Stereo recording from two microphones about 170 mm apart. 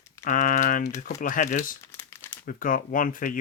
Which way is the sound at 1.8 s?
15° left (ahead or behind).